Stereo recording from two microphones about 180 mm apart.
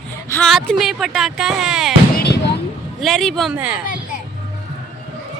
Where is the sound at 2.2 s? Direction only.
65° left (ahead or behind).